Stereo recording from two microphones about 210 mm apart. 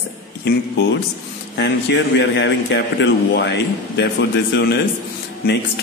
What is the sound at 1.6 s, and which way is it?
A man's voice, 55° left (ahead or behind).